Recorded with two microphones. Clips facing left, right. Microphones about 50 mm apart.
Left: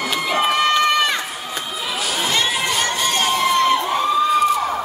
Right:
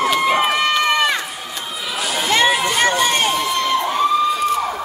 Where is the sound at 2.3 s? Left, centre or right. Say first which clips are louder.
Right 7 dB; right.